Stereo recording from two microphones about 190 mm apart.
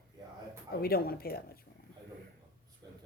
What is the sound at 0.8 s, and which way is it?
Speech, 50° left (ahead or behind).